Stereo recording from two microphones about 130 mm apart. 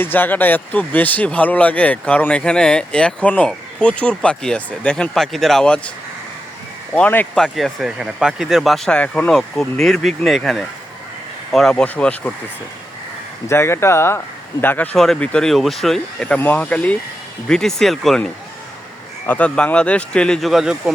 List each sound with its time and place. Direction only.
0.0 s speech: 15° left (ahead or behind)
6.9 s speech: 10° left (ahead or behind)
7.3 s speech: centre (ahead or behind)
13.5 s speech: 20° left (ahead or behind)
14.9 s speech: 5° left (ahead or behind)
19.3 s speech: 10° left (ahead or behind)